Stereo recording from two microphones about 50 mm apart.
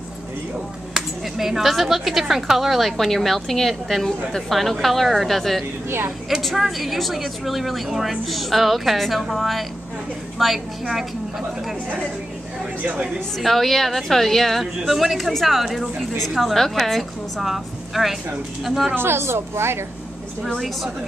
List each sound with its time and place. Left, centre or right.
0.9 s a woman's voice: centre
5.9 s a woman's voice: right
6.4 s a woman's voice: centre
12.8 s speech: right
13.4 s a woman's voice: centre
18.9 s a woman's voice: right